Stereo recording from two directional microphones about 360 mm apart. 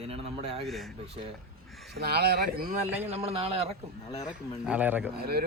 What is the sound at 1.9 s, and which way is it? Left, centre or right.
A man's voice, right.